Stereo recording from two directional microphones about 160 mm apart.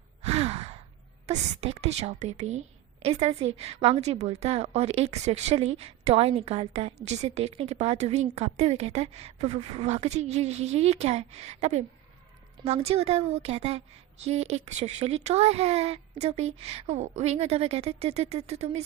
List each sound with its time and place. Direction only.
0.2 s sigh: 40° right (ahead or behind)
1.3 s a woman's voice: 40° right (ahead or behind)